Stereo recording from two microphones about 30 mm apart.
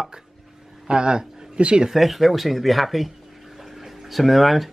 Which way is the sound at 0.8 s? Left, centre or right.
Right.